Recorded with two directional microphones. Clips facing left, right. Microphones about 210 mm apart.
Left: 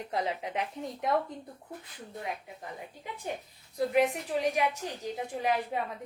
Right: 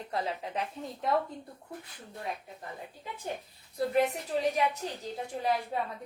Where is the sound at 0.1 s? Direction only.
20° left (ahead or behind).